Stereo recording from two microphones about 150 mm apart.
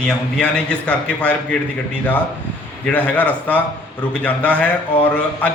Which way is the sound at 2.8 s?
10° left (ahead or behind).